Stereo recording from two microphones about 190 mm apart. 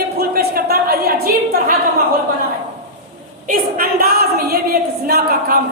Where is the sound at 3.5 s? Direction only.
50° right (ahead or behind).